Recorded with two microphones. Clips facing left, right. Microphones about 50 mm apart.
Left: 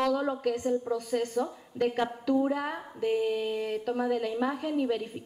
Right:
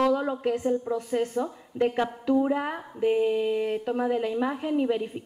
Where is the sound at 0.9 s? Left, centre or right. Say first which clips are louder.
Right 2 dB; centre.